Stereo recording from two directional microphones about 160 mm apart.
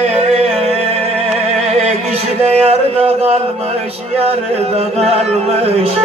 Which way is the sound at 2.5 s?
40° right (ahead or behind).